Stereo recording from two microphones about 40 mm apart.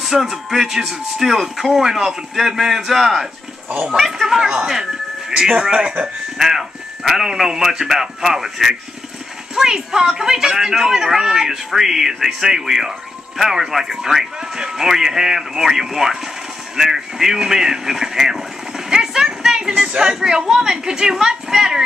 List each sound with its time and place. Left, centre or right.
0.0 s speech: centre; by 6.0 s right
6.3 s speech: centre
18.9 s a sound: centre
19.9 s speech: centre